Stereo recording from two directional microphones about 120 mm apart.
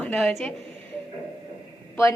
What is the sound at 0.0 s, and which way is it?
Speech, 5° left (ahead or behind).